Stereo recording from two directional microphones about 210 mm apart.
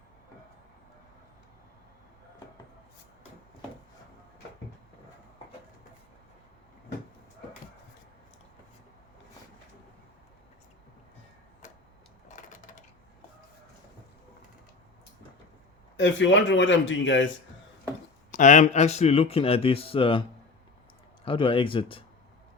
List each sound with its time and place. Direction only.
12.4 s a sound: 40° left (ahead or behind)
16.0 s speech: 60° left (ahead or behind)
18.3 s speech: 35° left (ahead or behind)
21.2 s speech: 25° left (ahead or behind)